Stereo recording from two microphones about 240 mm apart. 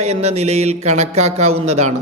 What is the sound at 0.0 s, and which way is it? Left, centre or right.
A man's voice, right.